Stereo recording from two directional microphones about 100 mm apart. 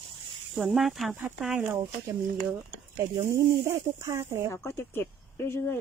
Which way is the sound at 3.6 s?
30° right (ahead or behind).